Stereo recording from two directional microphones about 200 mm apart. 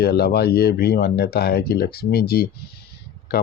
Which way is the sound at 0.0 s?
55° left (ahead or behind).